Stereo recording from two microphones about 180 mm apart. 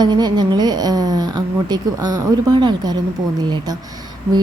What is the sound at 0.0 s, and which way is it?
A woman's voice, 25° right (ahead or behind).